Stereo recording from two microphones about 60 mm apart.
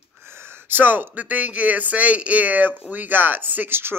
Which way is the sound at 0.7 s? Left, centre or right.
Right.